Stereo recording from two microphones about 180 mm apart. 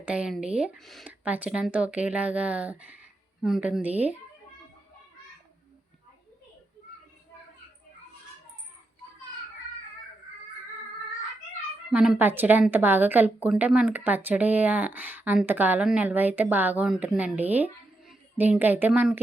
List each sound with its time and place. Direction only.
0.0 s a woman's voice: 5° right (ahead or behind)
11.9 s a woman's voice: 5° right (ahead or behind)